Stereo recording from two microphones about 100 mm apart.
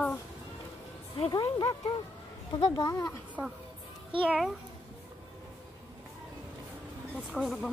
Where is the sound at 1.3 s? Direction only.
40° left (ahead or behind).